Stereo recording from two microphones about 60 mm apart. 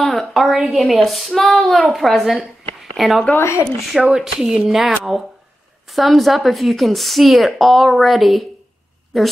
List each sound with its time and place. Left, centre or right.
0.0 s a woman's voice: centre
3.3 s speech: left
3.6 s a woman's voice: centre